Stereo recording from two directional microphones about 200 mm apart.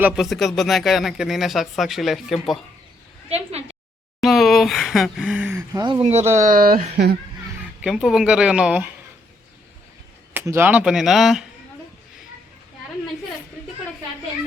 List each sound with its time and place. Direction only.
0.0 s speech: centre (ahead or behind)
3.2 s a woman's voice: 30° right (ahead or behind)
4.2 s speech: centre (ahead or behind); by 7.2 s 55° right (ahead or behind)
7.9 s speech: centre (ahead or behind)
10.3 s speech: 10° right (ahead or behind)